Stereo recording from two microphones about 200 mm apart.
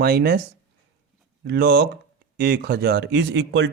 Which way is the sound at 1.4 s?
55° right (ahead or behind).